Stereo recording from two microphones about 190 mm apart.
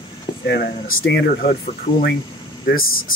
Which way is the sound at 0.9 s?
65° left (ahead or behind).